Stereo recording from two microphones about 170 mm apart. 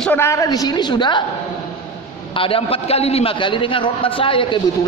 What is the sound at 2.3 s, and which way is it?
A man's voice, 30° left (ahead or behind).